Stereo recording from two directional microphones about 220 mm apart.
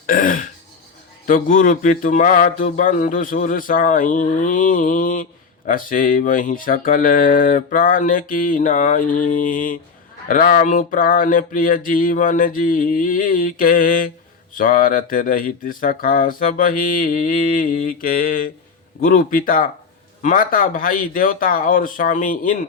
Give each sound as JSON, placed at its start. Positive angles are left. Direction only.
{"t": 0.0, "sound": "throat clearing", "side_deg": 40}
{"t": 1.3, "sound": "speech", "side_deg": 40}